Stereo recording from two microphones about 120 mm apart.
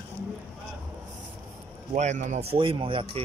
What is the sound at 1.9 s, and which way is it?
Speech, 80° right.